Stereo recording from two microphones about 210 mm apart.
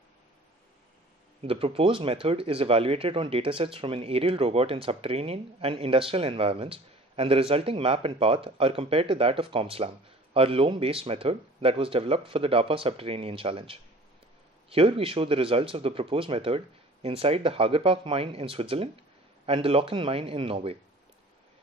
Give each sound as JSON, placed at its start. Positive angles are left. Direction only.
{"t": 1.4, "sound": "speech", "side_deg": -25}